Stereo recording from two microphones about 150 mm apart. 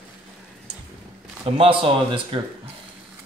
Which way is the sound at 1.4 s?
35° right (ahead or behind).